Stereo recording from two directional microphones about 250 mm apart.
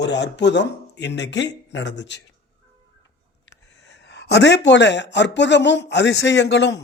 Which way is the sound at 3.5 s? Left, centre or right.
Left.